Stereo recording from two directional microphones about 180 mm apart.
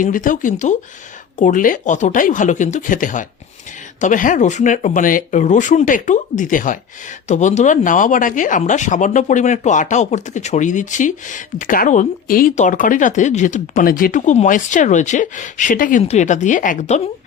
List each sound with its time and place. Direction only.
0.0 s speech: 50° left (ahead or behind)